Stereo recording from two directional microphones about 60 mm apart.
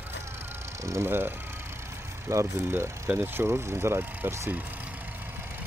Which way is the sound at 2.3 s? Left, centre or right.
Right.